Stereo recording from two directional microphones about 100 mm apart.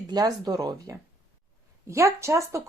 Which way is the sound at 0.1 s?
40° right (ahead or behind).